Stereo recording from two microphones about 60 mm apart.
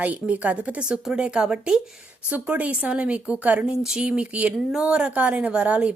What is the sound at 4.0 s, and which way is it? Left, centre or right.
A woman's voice, centre.